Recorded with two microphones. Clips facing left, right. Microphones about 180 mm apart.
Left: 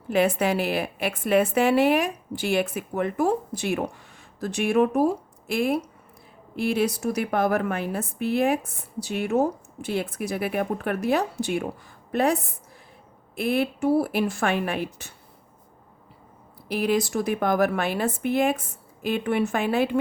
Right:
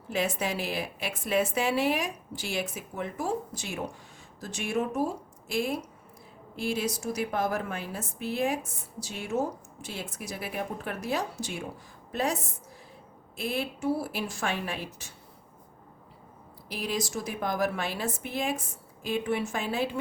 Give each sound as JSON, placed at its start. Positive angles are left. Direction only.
{"t": 0.1, "sound": "a woman's voice", "side_deg": 60}
{"t": 16.6, "sound": "a woman's voice", "side_deg": 60}